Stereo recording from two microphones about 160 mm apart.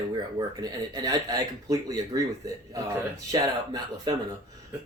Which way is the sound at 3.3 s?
20° right (ahead or behind).